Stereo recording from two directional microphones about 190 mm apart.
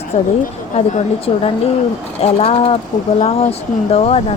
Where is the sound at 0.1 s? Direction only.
40° left (ahead or behind).